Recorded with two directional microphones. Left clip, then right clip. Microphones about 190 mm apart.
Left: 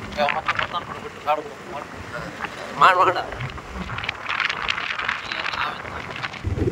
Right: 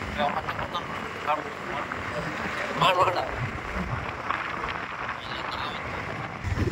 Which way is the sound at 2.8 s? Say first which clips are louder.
Left 7 dB; 15° left (ahead or behind).